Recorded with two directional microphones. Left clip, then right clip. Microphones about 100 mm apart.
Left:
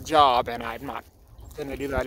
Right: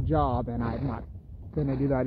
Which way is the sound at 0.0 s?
50° left (ahead or behind).